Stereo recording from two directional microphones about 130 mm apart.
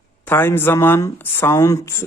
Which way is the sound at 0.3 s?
15° left (ahead or behind).